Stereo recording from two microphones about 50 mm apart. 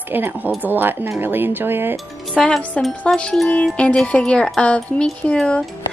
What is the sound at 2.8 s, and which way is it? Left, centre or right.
Speech, centre.